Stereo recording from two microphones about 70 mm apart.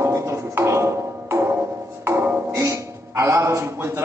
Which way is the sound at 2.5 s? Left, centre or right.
Right.